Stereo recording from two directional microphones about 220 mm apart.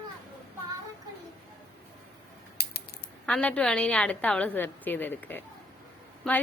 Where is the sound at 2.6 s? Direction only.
45° left (ahead or behind).